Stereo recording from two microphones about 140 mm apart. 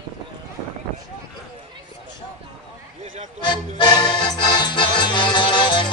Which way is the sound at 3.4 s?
35° left (ahead or behind).